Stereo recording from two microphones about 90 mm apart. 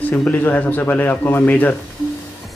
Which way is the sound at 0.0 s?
10° left (ahead or behind).